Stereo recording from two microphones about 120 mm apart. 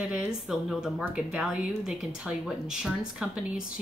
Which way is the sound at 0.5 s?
5° right (ahead or behind).